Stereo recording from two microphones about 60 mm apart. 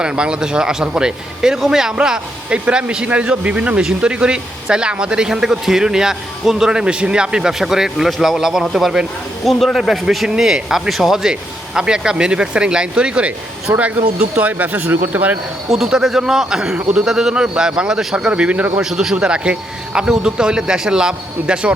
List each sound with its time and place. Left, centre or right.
0.0 s a man's voice: centre
9.4 s a man's voice: centre; by 15.4 s right
15.7 s a man's voice: centre
18.3 s speech: right
18.8 s a man's voice: centre
19.1 s a man's voice: centre